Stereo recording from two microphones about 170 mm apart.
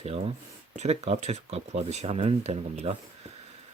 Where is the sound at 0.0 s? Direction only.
35° right (ahead or behind).